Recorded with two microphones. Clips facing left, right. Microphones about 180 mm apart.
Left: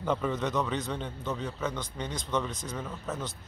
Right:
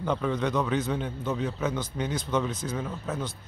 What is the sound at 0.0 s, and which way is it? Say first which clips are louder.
A man's voice: right 2 dB; centre (ahead or behind).